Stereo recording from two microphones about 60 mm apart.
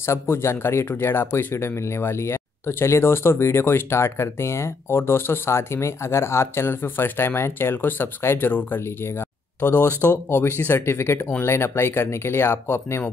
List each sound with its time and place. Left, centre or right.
0.0 s speech: left